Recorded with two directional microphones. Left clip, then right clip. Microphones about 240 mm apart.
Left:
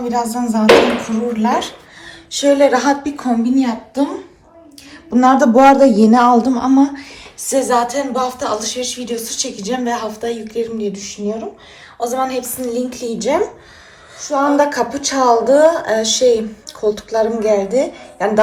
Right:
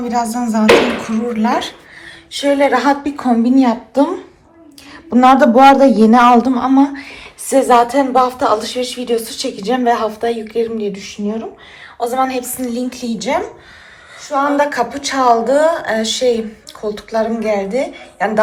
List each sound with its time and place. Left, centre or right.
0.0 s music: centre
0.3 s a man's voice: centre